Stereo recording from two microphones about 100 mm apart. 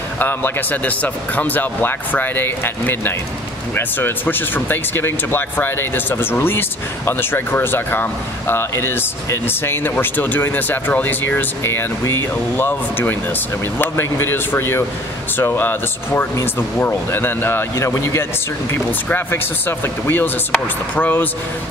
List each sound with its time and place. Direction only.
0.2 s speech: 20° left (ahead or behind)